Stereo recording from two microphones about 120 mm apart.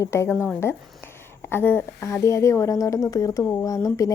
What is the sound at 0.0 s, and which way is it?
A woman's voice, 25° left (ahead or behind).